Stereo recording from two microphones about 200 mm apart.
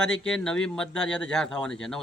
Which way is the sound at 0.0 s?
5° left (ahead or behind).